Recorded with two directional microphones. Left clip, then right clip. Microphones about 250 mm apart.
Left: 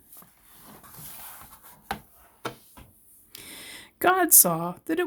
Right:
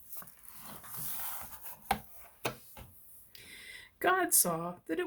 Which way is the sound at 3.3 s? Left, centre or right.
Left.